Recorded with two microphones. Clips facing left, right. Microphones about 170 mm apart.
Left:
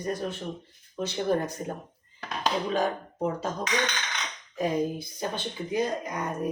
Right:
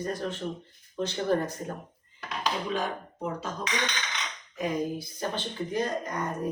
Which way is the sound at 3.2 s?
45° left (ahead or behind).